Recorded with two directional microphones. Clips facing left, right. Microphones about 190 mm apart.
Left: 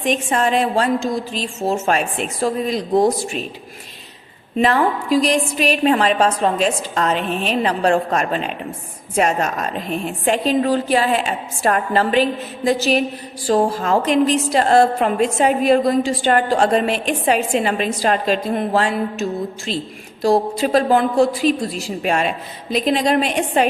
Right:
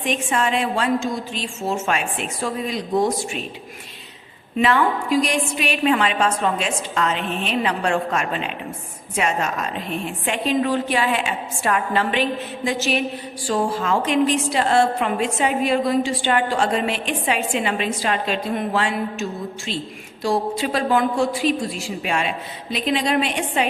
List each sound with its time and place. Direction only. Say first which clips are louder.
0.0 s a woman's voice: left 3 dB; 40° left (ahead or behind)
4.5 s a woman's voice: left 2 dB; 35° left (ahead or behind)